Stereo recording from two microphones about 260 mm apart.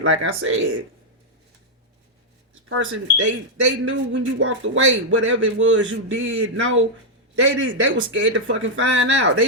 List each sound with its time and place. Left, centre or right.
0.0 s speech: right
2.6 s speech: right